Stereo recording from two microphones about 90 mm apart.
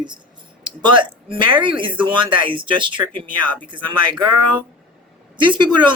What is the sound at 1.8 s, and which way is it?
Speech, 65° right (ahead or behind).